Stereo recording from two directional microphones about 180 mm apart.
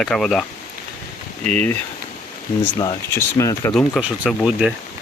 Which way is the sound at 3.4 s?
15° left (ahead or behind).